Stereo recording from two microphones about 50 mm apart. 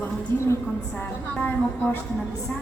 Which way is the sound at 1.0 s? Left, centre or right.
Left.